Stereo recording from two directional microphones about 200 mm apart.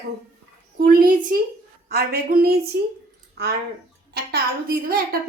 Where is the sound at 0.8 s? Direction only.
45° right (ahead or behind).